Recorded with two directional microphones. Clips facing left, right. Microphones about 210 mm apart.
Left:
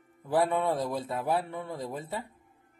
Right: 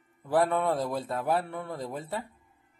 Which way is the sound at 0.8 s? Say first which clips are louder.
Right 1 dB; 20° left (ahead or behind).